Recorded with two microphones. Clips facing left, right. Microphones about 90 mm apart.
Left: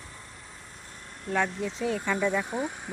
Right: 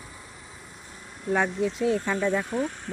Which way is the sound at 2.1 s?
15° right (ahead or behind).